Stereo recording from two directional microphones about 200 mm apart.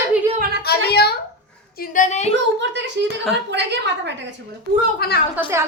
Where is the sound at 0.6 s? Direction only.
55° left (ahead or behind).